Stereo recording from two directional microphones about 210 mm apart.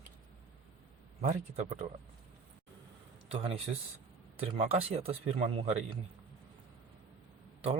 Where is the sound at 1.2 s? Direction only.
35° right (ahead or behind).